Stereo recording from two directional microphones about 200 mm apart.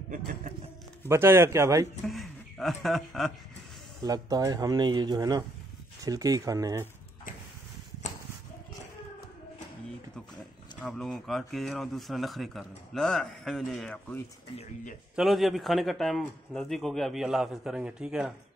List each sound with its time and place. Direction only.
1.0 s speech: 10° right (ahead or behind)
2.0 s speech: centre (ahead or behind)
4.0 s speech: 20° right (ahead or behind)
10.8 s speech: 5° left (ahead or behind)